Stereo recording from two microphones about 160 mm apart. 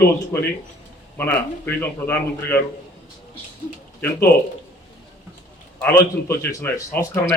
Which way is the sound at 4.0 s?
15° left (ahead or behind).